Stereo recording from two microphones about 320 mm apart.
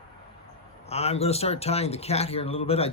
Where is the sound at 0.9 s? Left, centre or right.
Centre.